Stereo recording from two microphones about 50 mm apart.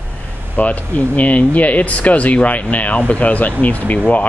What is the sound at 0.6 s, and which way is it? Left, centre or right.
Speech, left.